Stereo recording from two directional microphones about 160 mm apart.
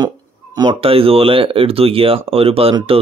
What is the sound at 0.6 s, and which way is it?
A man's voice, 30° right (ahead or behind).